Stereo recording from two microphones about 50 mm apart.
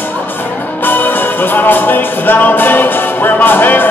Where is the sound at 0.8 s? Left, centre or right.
Left.